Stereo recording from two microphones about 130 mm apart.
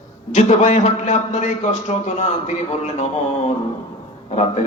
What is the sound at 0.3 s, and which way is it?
A man's voice, 65° left (ahead or behind).